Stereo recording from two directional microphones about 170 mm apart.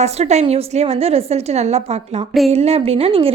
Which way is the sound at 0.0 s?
40° right (ahead or behind).